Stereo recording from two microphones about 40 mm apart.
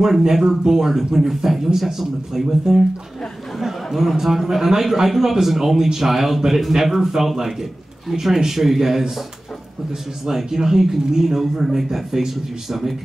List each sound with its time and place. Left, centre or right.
0.0 s speech: centre
10.2 s speech: centre